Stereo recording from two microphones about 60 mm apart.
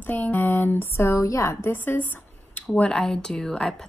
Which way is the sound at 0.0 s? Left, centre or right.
Left.